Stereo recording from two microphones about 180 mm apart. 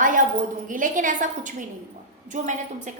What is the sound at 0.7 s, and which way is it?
A woman's voice, 45° right (ahead or behind).